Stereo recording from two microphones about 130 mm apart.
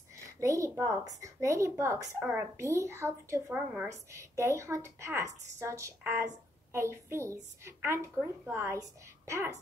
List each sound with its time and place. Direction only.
0.1 s a woman's voice: 25° right (ahead or behind)